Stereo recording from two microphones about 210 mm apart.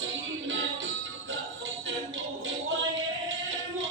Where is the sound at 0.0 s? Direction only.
65° right (ahead or behind).